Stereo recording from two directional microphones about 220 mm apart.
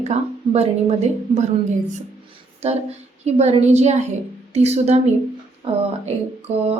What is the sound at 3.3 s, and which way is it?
A woman's voice, 30° right (ahead or behind).